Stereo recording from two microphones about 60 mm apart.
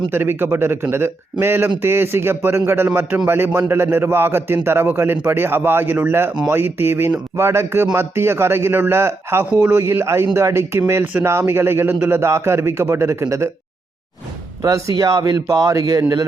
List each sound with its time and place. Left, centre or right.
0.1 s a man's voice: right
14.6 s speech: right